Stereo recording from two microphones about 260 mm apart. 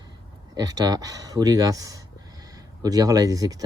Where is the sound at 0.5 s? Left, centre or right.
Centre.